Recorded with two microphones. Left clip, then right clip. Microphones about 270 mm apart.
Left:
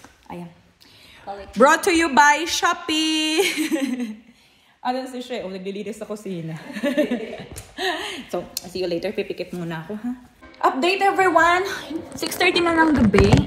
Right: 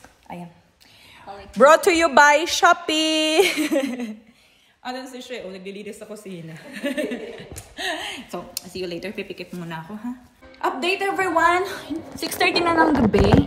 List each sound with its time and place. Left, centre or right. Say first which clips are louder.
0.3 s a woman's voice: even; centre
4.8 s a woman's voice: left 6 dB; centre
7.7 s a woman's voice: left 2 dB; centre